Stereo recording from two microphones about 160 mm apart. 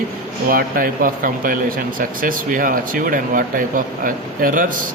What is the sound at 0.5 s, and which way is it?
Speech, 60° right (ahead or behind).